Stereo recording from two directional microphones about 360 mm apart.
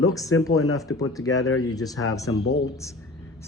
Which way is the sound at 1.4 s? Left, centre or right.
Left.